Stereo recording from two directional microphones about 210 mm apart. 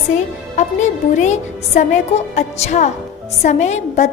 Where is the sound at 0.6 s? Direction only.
35° left (ahead or behind).